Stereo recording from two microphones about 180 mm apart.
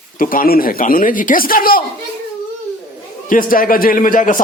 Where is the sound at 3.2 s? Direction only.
50° left (ahead or behind).